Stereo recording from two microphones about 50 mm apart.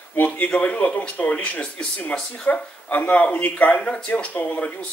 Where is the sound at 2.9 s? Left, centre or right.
Left.